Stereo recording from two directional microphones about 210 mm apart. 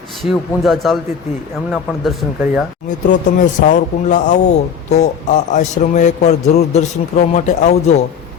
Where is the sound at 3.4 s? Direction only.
35° left (ahead or behind).